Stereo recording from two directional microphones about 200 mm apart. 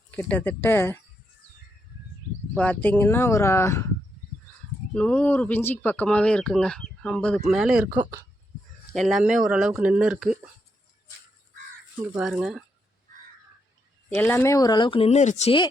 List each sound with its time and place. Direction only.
0.1 s speech: 10° left (ahead or behind)
2.6 s speech: 5° left (ahead or behind)
4.9 s speech: 5° left (ahead or behind)
7.9 s speech: 20° right (ahead or behind)
8.9 s speech: centre (ahead or behind)
12.1 s speech: 5° right (ahead or behind)
14.1 s speech: 10° left (ahead or behind); by 15.6 s 30° left (ahead or behind)